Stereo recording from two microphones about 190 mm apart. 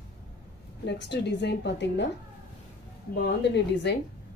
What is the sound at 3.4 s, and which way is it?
Speech, 65° left (ahead or behind).